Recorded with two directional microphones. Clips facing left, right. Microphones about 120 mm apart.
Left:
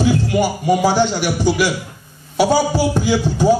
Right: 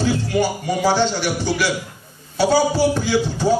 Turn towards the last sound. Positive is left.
turn(degrees=15)  # may be behind; listen again after turning